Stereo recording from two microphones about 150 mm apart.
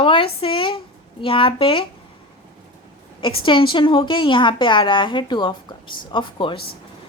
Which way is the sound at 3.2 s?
35° left (ahead or behind).